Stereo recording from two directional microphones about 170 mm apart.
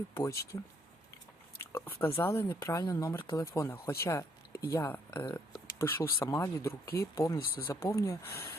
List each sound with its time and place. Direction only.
0.1 s speech: 15° left (ahead or behind)
1.7 s speech: 15° left (ahead or behind)